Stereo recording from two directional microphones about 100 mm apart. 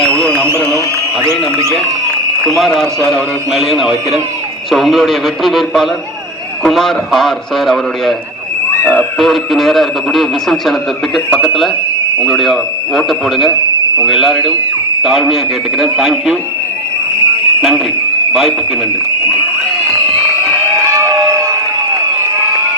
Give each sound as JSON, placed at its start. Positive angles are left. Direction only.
{"t": 0.0, "sound": "a sound", "side_deg": 5}
{"t": 2.5, "sound": "a man's voice", "side_deg": 0}
{"t": 8.8, "sound": "speech", "side_deg": 15}
{"t": 9.1, "sound": "a man's voice", "side_deg": 0}